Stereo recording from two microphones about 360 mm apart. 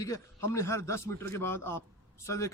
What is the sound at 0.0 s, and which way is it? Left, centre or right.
A man's voice, centre.